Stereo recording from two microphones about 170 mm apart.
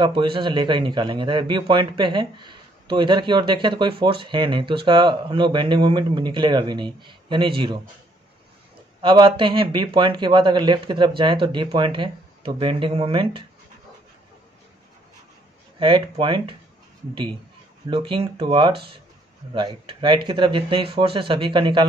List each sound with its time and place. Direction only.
0.0 s a man's voice: 30° right (ahead or behind)
9.0 s a man's voice: 30° right (ahead or behind)
15.8 s a man's voice: 30° right (ahead or behind)
17.8 s a man's voice: 30° right (ahead or behind)
18.7 s speech: 70° right (ahead or behind)
19.5 s a man's voice: 30° right (ahead or behind)